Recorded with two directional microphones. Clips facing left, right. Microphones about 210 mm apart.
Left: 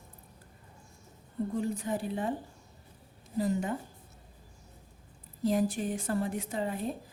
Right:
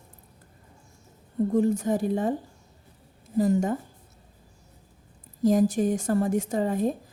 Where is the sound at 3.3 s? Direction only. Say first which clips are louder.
Right 7 dB; 45° right (ahead or behind).